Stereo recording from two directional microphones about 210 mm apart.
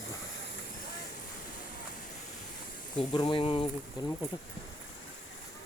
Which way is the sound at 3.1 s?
20° left (ahead or behind).